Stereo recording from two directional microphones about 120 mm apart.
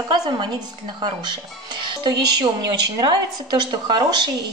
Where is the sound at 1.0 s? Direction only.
40° right (ahead or behind).